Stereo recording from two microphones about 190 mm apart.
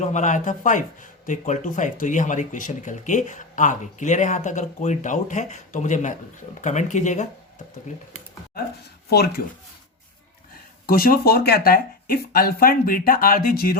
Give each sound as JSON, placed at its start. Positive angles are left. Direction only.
{"t": 0.0, "sound": "speech", "side_deg": 40}
{"t": 9.0, "sound": "speech", "side_deg": 55}
{"t": 10.8, "sound": "speech", "side_deg": 50}